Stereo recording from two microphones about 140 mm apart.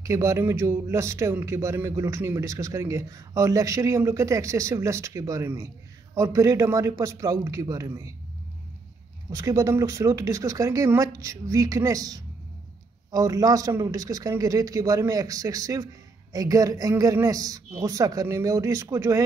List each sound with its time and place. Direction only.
0.0 s a man's voice: 20° right (ahead or behind)
9.3 s a man's voice: 25° right (ahead or behind)